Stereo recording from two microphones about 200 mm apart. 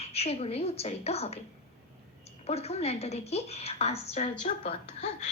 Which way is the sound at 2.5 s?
30° left (ahead or behind).